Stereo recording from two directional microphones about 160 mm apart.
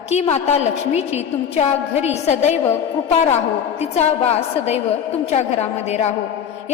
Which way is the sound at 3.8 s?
40° left (ahead or behind).